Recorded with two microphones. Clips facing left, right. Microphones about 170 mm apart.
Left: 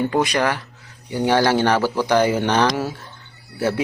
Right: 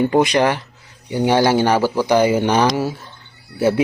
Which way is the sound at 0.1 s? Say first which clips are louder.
Right 4 dB; 20° right (ahead or behind).